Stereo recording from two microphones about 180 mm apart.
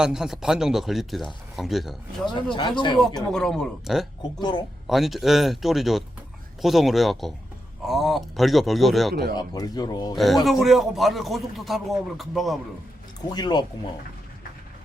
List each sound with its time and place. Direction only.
0.0 s a man's voice: 5° right (ahead or behind)
2.3 s speech: 25° left (ahead or behind)
3.2 s a man's voice: 5° left (ahead or behind)
4.4 s speech: 25° left (ahead or behind)
4.9 s a man's voice: centre (ahead or behind)
9.3 s speech: 20° left (ahead or behind)
10.2 s a man's voice: centre (ahead or behind)
13.3 s speech: 25° left (ahead or behind)